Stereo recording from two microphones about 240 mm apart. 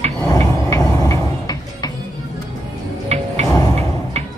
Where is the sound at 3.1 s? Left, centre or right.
Right.